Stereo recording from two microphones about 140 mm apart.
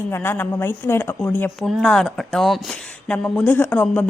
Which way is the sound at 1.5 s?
Centre (ahead or behind).